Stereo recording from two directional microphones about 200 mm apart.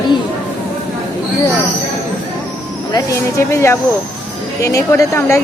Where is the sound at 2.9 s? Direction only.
15° left (ahead or behind).